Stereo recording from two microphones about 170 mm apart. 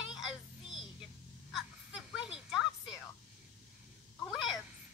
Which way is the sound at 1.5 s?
5° right (ahead or behind).